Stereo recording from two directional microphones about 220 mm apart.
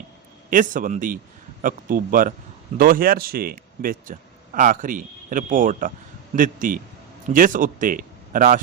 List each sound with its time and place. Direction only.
0.5 s speech: 35° right (ahead or behind)